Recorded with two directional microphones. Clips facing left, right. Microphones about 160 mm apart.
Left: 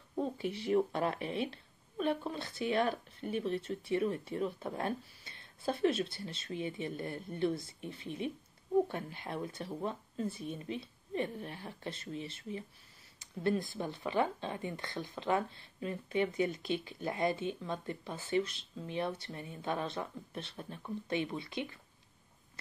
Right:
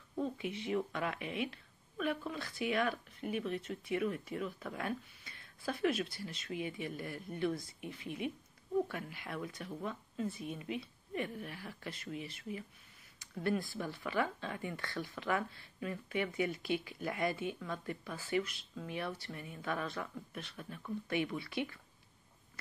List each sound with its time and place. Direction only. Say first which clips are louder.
0.2 s speech: left 2 dB; 35° left (ahead or behind)